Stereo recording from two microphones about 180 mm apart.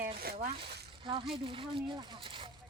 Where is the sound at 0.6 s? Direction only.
30° right (ahead or behind).